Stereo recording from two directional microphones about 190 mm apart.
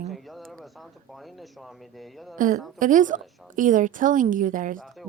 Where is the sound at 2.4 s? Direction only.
45° right (ahead or behind).